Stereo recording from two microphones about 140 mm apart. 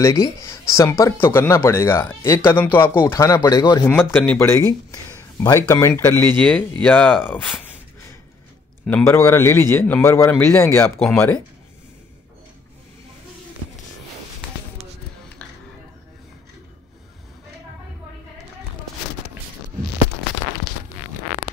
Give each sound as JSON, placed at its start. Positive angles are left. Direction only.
{"t": 0.0, "sound": "speech", "side_deg": 20}
{"t": 3.8, "sound": "speech", "side_deg": 15}
{"t": 6.3, "sound": "a man's voice", "side_deg": 10}
{"t": 8.8, "sound": "a man's voice", "side_deg": 15}